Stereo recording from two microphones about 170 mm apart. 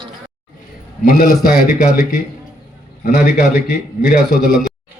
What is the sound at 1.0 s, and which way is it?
Speech, 60° left (ahead or behind).